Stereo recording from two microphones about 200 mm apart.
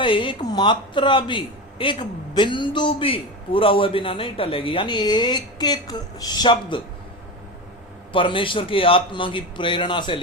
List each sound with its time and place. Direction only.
0.0 s a man's voice: 25° left (ahead or behind)
8.1 s a man's voice: 25° left (ahead or behind)